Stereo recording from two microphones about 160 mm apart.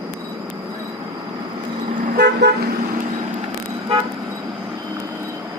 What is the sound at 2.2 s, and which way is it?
Car, 90° right.